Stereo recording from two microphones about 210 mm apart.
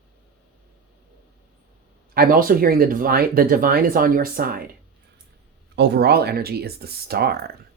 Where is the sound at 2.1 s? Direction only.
40° right (ahead or behind).